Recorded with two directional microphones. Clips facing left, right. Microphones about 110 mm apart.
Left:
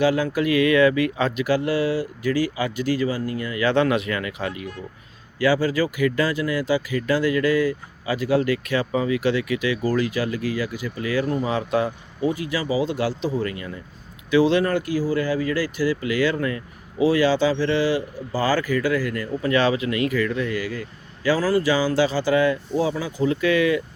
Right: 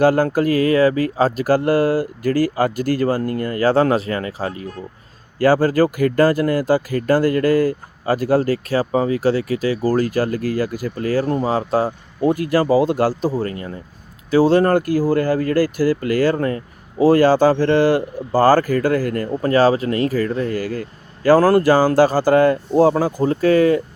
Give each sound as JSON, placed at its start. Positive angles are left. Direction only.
{"t": 0.0, "sound": "speech", "side_deg": -45}